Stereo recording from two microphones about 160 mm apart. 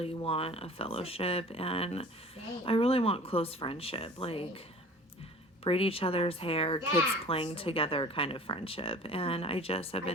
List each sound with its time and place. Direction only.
0.0 s a child's voice: 35° left (ahead or behind)
5.6 s a child's voice: 35° left (ahead or behind)